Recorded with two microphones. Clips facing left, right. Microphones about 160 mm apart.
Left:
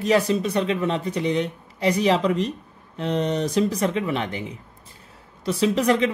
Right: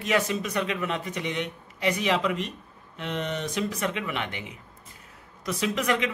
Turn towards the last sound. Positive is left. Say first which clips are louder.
# left 7 dB
turn(degrees=35)  # may be behind; listen again after turning